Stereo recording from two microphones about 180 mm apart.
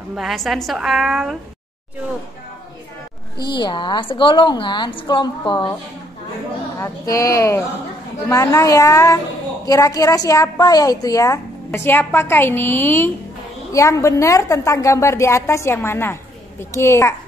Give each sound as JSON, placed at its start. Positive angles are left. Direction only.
{"t": 0.1, "sound": "a woman's voice", "side_deg": 0}
{"t": 3.6, "sound": "a woman's voice", "side_deg": 25}
{"t": 6.8, "sound": "a woman's voice", "side_deg": 20}